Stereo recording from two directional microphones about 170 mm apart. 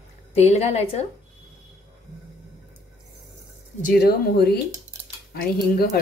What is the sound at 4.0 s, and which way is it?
Speech, 70° left (ahead or behind).